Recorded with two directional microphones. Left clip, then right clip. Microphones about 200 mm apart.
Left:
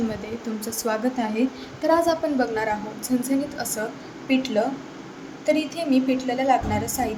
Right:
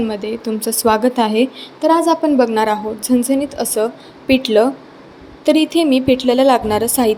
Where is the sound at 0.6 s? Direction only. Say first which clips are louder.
Right 10 dB; 15° right (ahead or behind).